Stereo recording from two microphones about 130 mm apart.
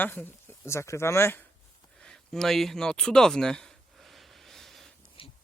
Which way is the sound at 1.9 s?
5° left (ahead or behind).